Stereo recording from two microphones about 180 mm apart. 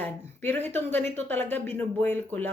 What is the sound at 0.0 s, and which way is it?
A woman's voice, 10° left (ahead or behind).